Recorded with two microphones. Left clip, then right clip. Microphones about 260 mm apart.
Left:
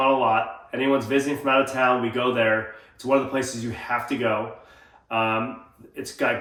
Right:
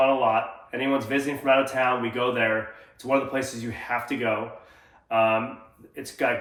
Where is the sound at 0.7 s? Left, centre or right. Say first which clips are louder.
Left 3 dB; centre.